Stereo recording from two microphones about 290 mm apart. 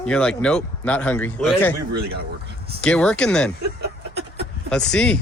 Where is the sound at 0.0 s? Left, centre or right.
Centre.